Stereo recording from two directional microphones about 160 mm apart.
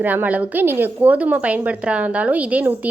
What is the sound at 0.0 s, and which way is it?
A woman's voice, 10° right (ahead or behind).